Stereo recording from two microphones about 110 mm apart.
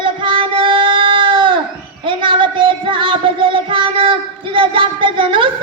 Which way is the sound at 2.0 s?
50° right (ahead or behind).